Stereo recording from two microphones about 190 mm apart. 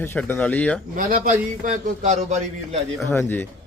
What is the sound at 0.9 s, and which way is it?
A man's voice, 45° right (ahead or behind).